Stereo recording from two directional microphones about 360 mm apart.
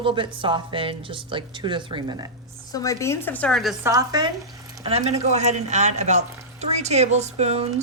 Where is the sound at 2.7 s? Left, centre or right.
Centre.